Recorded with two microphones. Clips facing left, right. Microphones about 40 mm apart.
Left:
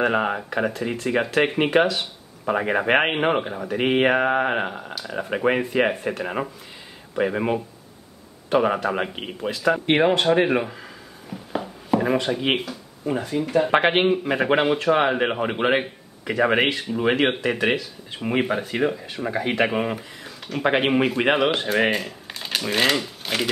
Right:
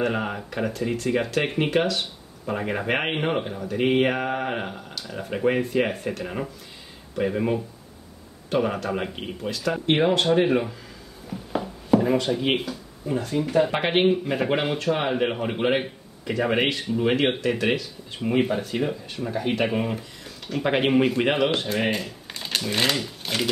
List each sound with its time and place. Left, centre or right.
0.0 s speech: left
9.6 s speech: centre
11.2 s a sound: centre
12.2 s speech: centre
13.3 s speech: centre
13.7 s speech: left; by 18.2 s centre
18.2 s speech: left